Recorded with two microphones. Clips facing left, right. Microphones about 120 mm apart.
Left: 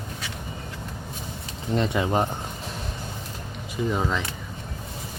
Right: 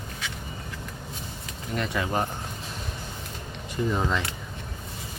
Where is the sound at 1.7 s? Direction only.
25° left (ahead or behind).